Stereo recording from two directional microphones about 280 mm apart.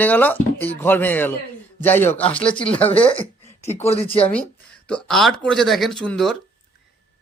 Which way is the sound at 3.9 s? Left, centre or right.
Centre.